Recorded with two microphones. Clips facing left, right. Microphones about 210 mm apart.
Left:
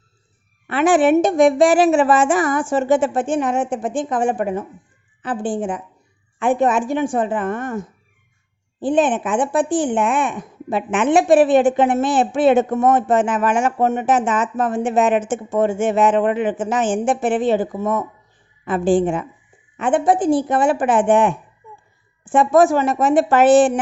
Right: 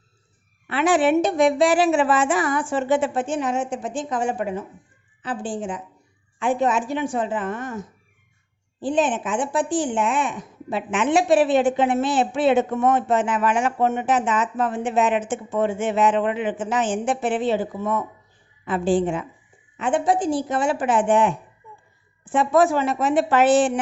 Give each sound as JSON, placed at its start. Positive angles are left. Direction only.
{"t": 0.7, "sound": "a woman's voice", "side_deg": 50}